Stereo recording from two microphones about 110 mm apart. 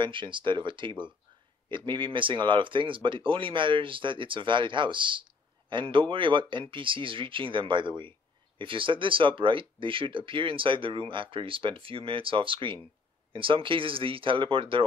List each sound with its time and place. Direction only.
0.0 s speech: 50° right (ahead or behind)